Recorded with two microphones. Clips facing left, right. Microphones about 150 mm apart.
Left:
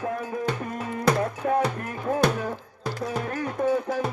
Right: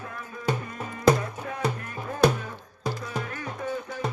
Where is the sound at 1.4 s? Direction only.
45° left (ahead or behind).